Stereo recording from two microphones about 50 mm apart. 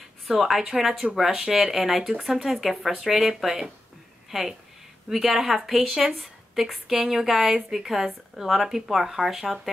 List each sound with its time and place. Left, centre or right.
0.3 s a woman's voice: centre